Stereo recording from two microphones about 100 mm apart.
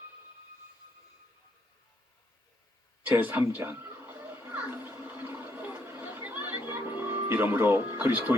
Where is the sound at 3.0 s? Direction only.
15° right (ahead or behind).